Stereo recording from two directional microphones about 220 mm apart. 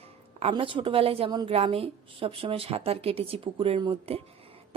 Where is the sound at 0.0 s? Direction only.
25° right (ahead or behind).